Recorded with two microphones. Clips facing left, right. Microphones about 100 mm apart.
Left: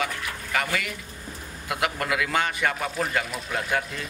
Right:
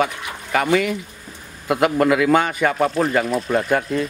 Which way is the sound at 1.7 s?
45° right (ahead or behind).